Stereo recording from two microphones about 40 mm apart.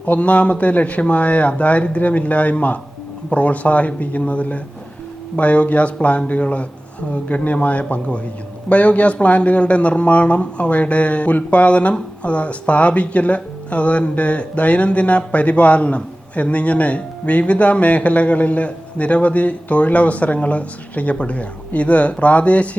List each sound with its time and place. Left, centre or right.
0.0 s speech: left